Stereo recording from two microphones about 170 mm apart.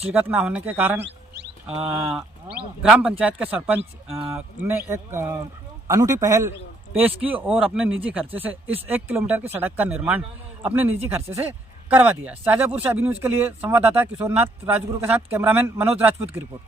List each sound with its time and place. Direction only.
0.1 s speech: 10° right (ahead or behind)